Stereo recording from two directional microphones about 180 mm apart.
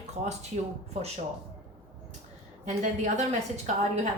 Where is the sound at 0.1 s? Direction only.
40° right (ahead or behind).